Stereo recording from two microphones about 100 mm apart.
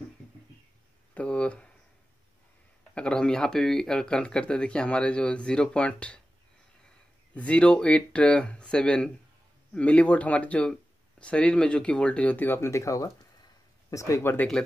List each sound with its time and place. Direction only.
1.1 s speech: 10° left (ahead or behind)
2.9 s speech: 10° left (ahead or behind)
7.3 s speech: 10° left (ahead or behind); by 14.3 s 30° left (ahead or behind)